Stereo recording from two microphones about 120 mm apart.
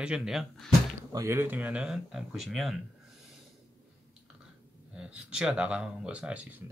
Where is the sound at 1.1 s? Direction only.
20° right (ahead or behind); by 2.8 s centre (ahead or behind).